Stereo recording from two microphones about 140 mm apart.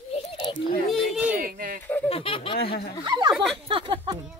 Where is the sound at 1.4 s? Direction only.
90° right.